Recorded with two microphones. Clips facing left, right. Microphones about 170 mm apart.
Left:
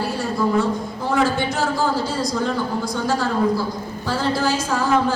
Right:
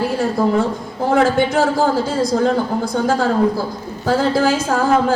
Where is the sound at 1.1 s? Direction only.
55° right (ahead or behind).